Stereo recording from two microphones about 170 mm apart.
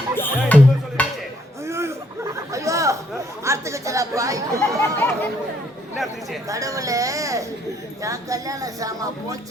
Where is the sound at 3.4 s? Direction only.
15° right (ahead or behind).